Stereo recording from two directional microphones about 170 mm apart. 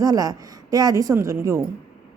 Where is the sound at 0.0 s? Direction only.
20° right (ahead or behind).